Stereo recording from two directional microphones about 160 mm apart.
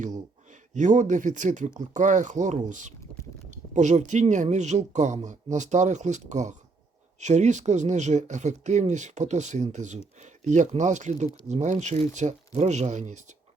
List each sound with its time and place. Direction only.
0.7 s speech: 50° right (ahead or behind)